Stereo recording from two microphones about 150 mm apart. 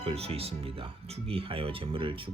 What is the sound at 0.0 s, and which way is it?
Speech, 40° right (ahead or behind).